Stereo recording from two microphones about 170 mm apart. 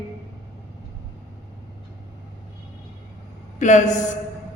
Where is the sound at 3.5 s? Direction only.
45° left (ahead or behind).